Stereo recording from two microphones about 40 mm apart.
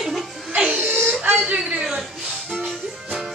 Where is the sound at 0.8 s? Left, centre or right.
Right.